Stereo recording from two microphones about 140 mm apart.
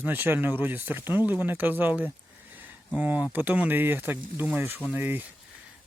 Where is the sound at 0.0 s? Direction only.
15° right (ahead or behind).